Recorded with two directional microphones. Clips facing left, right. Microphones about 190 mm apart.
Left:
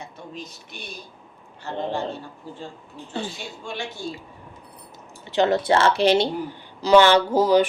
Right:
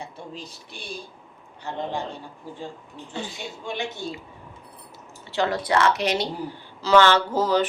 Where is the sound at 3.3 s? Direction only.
20° right (ahead or behind).